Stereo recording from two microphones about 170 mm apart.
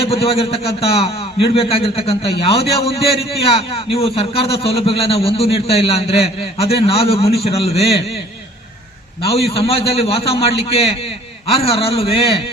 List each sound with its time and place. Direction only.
0.0 s a man's voice: 35° left (ahead or behind)
9.5 s a man's voice: 35° left (ahead or behind)